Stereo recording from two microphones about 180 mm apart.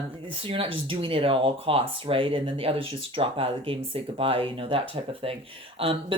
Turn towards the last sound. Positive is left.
turn(degrees=-30)  # may be behind; listen again after turning